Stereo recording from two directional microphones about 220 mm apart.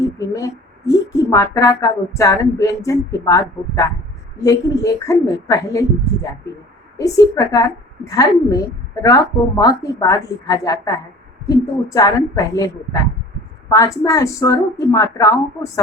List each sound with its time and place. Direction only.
0.3 s speech: 15° left (ahead or behind)
7.0 s speech: 15° left (ahead or behind)